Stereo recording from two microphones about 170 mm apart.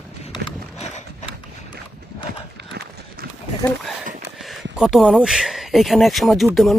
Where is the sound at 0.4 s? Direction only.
35° left (ahead or behind).